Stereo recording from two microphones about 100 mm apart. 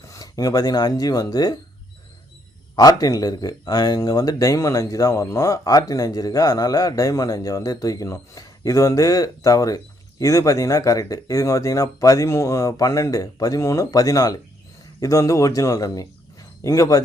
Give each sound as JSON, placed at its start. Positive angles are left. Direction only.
{"t": 0.1, "sound": "speech", "side_deg": 35}
{"t": 2.7, "sound": "speech", "side_deg": 40}